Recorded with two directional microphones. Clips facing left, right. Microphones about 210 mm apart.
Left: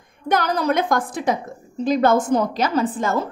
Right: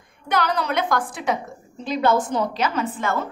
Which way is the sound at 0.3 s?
45° left (ahead or behind).